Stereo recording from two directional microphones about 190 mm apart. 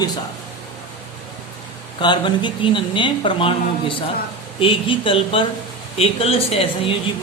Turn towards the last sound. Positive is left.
turn(degrees=30)  # may be behind; listen again after turning